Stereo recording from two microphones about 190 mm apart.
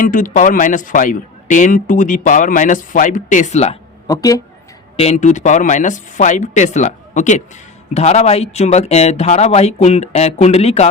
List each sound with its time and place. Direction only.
0.0 s speech: 45° left (ahead or behind)
4.0 s speech: 20° left (ahead or behind)
4.9 s speech: 35° left (ahead or behind)